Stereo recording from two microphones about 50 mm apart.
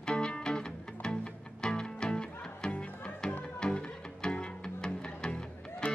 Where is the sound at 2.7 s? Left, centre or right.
Left.